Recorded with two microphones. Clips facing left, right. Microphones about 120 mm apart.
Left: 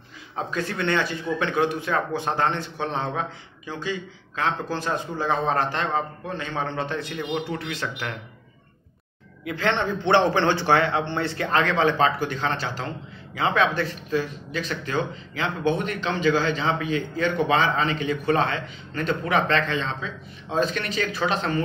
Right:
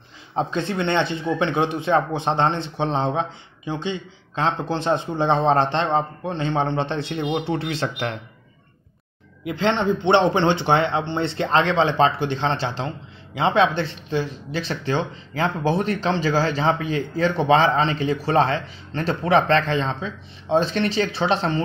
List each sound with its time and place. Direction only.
0.4 s speech: 25° right (ahead or behind)
9.4 s speech: 20° right (ahead or behind)